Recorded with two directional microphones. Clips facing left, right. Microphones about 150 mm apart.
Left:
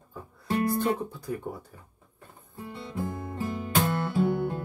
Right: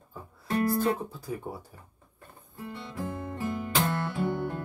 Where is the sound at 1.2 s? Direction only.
10° right (ahead or behind).